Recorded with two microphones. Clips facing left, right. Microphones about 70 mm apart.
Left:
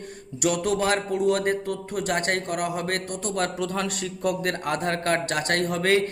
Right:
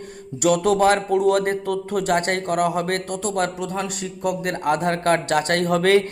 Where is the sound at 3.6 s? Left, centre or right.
Centre.